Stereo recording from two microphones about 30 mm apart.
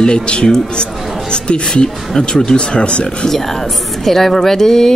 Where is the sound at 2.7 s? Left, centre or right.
Left.